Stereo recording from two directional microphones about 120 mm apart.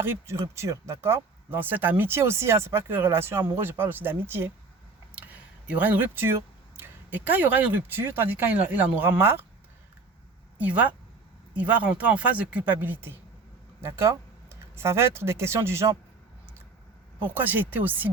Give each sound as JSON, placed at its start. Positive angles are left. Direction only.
{"t": 0.0, "sound": "speech", "side_deg": -25}
{"t": 5.1, "sound": "a sound", "side_deg": -10}
{"t": 6.7, "sound": "speech", "side_deg": -15}
{"t": 10.6, "sound": "speech", "side_deg": -10}
{"t": 17.2, "sound": "speech", "side_deg": -15}